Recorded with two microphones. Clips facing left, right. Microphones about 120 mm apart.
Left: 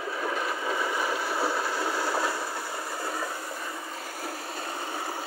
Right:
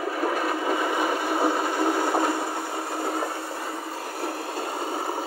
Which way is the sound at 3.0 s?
30° right (ahead or behind).